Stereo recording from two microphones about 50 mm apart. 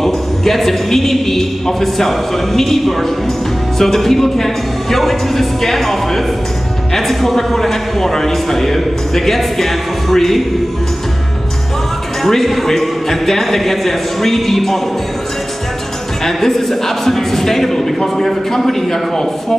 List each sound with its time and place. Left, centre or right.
0.0 s a man's voice: centre
12.2 s a man's voice: centre
16.3 s a man's voice: centre